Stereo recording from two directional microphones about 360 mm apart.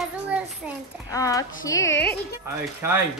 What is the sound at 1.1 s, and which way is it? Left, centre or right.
Speech, centre.